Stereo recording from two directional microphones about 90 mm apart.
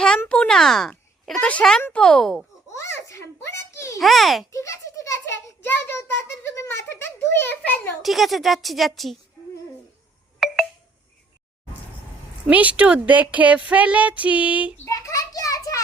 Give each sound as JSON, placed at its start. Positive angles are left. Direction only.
{"t": 0.3, "sound": "a child's voice", "side_deg": 10}
{"t": 2.7, "sound": "a sound", "side_deg": 35}
{"t": 4.0, "sound": "a woman's voice", "side_deg": 0}
{"t": 4.5, "sound": "a child's voice", "side_deg": 35}
{"t": 8.0, "sound": "a woman's voice", "side_deg": 0}
{"t": 10.4, "sound": "telephone dialing", "side_deg": 0}
{"t": 12.5, "sound": "speech", "side_deg": -15}
{"t": 14.8, "sound": "a sound", "side_deg": 35}